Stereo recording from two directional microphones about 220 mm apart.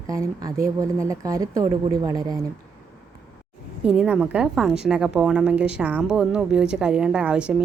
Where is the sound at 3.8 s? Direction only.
5° right (ahead or behind).